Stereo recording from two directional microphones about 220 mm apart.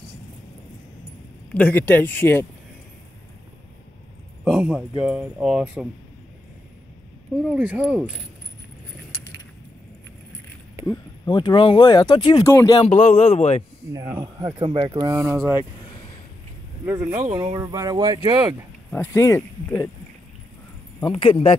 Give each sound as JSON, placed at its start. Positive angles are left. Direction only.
{"t": 1.5, "sound": "speech", "side_deg": 5}
{"t": 4.5, "sound": "speech", "side_deg": -5}
{"t": 7.5, "sound": "speech", "side_deg": -5}
{"t": 11.2, "sound": "speech", "side_deg": 20}
{"t": 12.8, "sound": "speech", "side_deg": 30}
{"t": 13.9, "sound": "speech", "side_deg": -15}
{"t": 16.8, "sound": "speech", "side_deg": -10}
{"t": 18.9, "sound": "speech", "side_deg": 10}
{"t": 21.0, "sound": "speech", "side_deg": 25}